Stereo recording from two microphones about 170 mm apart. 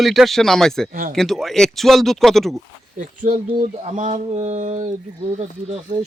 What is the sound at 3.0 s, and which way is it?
Mantra, 50° right (ahead or behind).